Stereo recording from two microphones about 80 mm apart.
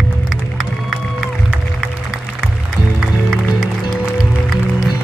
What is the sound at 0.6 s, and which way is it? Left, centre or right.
Music, centre.